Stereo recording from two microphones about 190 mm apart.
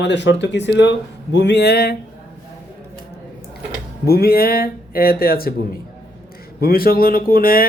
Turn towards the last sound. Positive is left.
turn(degrees=50)  # may be behind; listen again after turning